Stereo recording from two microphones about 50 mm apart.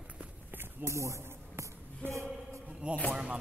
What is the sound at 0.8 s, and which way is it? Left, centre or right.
Speech, right.